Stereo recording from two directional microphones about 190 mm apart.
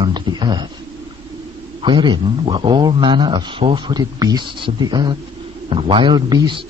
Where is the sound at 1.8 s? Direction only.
25° right (ahead or behind).